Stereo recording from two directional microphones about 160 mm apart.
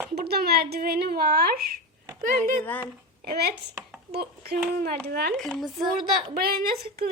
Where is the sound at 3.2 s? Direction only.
85° right.